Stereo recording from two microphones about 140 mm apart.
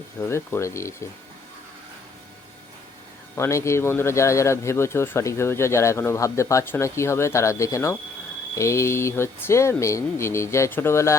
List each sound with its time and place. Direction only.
0.2 s speech: 20° left (ahead or behind)
3.3 s speech: 20° left (ahead or behind)